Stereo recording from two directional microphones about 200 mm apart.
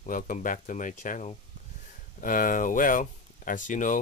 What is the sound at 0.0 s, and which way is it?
Speech, 40° left (ahead or behind).